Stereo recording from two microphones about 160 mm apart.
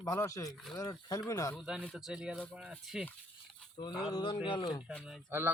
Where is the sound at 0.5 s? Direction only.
Centre (ahead or behind).